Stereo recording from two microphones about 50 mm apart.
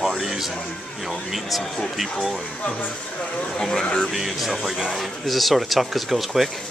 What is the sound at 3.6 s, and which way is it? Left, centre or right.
Speech, centre.